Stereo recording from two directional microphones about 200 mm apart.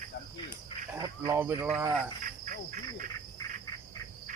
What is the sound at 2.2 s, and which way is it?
Insect, 40° right (ahead or behind).